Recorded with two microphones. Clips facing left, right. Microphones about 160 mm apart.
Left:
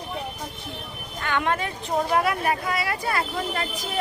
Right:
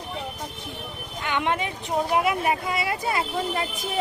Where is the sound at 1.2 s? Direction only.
20° right (ahead or behind).